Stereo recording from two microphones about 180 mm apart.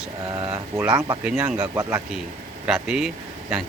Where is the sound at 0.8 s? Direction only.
10° right (ahead or behind).